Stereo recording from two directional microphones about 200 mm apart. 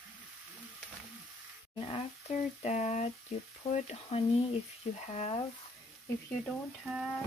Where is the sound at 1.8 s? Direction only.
30° left (ahead or behind).